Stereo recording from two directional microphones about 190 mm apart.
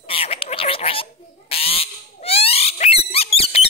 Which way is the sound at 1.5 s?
30° left (ahead or behind).